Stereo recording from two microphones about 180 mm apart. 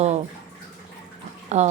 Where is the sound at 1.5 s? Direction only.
40° right (ahead or behind).